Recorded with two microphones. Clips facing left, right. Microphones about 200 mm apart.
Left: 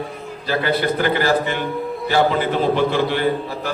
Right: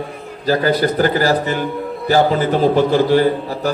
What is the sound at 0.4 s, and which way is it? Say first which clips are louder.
A man's voice: right 5 dB; 40° right (ahead or behind).